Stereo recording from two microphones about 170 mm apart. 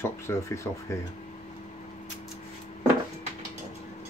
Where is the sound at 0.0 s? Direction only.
15° left (ahead or behind).